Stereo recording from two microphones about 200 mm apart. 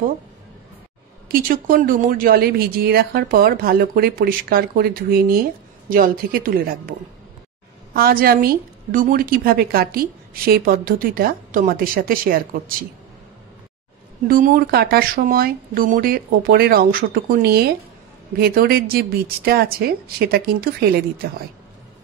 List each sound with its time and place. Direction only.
1.3 s a woman's voice: 45° right (ahead or behind)
14.2 s a woman's voice: 45° right (ahead or behind)